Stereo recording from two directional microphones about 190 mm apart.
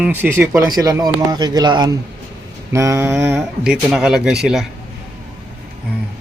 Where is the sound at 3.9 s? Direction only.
Centre (ahead or behind).